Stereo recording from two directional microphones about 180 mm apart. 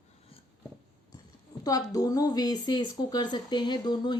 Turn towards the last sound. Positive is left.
turn(degrees=25)  # may be behind; listen again after turning